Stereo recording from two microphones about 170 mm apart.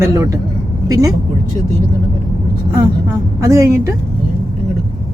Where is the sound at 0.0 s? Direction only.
20° right (ahead or behind).